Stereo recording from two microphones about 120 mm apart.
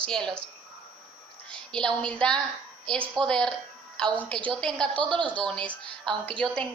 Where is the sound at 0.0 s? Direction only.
5° left (ahead or behind).